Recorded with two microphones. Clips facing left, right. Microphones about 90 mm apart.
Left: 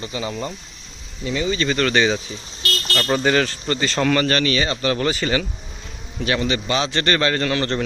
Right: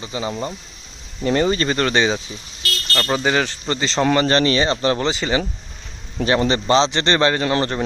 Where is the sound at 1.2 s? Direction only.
50° right (ahead or behind).